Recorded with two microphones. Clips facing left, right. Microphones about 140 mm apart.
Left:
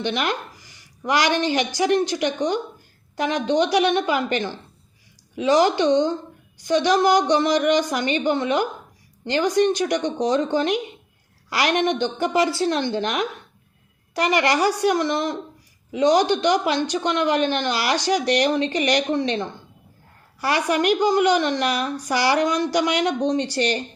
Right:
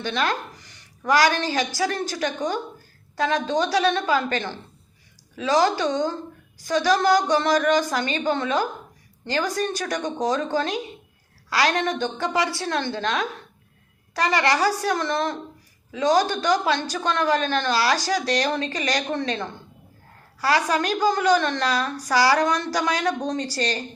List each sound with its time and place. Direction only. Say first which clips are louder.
0.0 s a woman's voice: left 1 dB; 20° left (ahead or behind)